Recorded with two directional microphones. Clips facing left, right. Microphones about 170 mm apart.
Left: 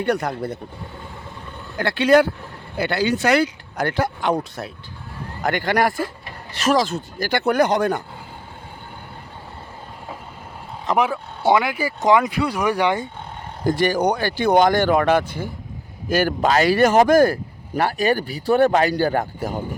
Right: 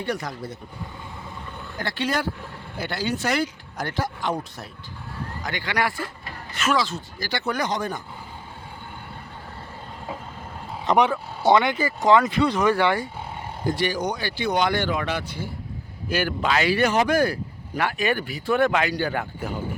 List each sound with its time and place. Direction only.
0.0 s speech: 60° left (ahead or behind)
1.8 s speech: 65° left (ahead or behind)
5.4 s speech: 50° left (ahead or behind)
6.9 s speech: 55° left (ahead or behind)
10.8 s a man's voice: 5° left (ahead or behind)
13.7 s speech: 50° left (ahead or behind)